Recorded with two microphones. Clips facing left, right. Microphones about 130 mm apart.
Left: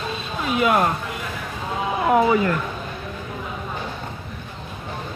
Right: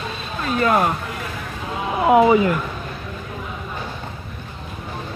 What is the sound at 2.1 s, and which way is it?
Speech, 15° right (ahead or behind).